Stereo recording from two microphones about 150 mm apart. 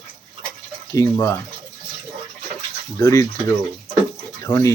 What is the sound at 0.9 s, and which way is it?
Speech, 20° left (ahead or behind).